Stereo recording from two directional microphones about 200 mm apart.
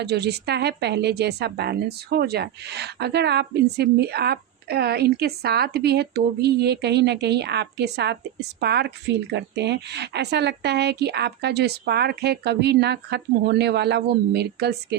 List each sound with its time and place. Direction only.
0.0 s a woman's voice: 55° right (ahead or behind)